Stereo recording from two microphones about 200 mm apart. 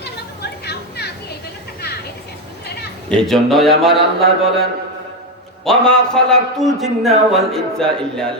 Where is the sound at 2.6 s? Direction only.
55° left (ahead or behind).